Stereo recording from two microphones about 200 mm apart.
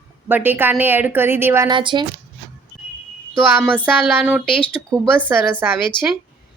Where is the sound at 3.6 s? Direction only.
Centre (ahead or behind).